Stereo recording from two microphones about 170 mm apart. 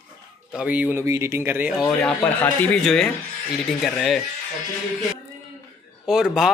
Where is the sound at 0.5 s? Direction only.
10° right (ahead or behind).